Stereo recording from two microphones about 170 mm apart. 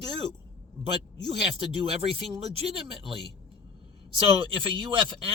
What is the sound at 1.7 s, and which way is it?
Speech, 35° right (ahead or behind).